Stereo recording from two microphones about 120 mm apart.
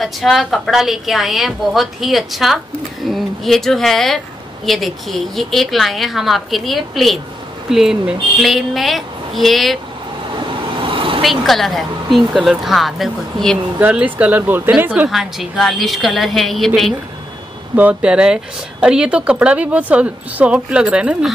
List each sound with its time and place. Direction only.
0.0 s a woman's voice: centre (ahead or behind)
10.4 s vehicle: 45° right (ahead or behind)
11.2 s a woman's voice: centre (ahead or behind)
13.7 s speech: 15° right (ahead or behind)
15.0 s a woman's voice: centre (ahead or behind)
17.7 s speech: 10° right (ahead or behind)